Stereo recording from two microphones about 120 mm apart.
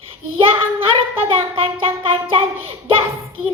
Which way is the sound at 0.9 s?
50° right (ahead or behind).